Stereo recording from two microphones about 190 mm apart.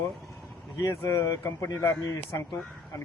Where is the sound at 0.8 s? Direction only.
15° left (ahead or behind).